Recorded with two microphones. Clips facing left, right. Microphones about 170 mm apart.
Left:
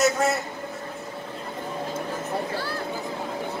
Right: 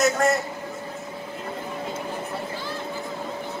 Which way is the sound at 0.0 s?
Centre (ahead or behind).